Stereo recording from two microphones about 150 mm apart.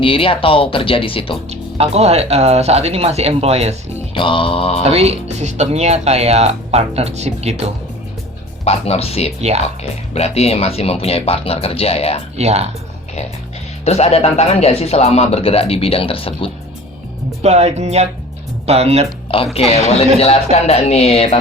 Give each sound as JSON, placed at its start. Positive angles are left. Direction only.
{"t": 0.0, "sound": "speech", "side_deg": 35}
{"t": 1.5, "sound": "speech", "side_deg": -45}
{"t": 4.1, "sound": "speech", "side_deg": 35}
{"t": 4.8, "sound": "speech", "side_deg": -45}
{"t": 8.6, "sound": "a man's voice", "side_deg": 45}
{"t": 12.4, "sound": "speech", "side_deg": -45}
{"t": 13.8, "sound": "a man's voice", "side_deg": 45}
{"t": 17.4, "sound": "speech", "side_deg": -45}
{"t": 19.6, "sound": "a man's voice", "side_deg": 40}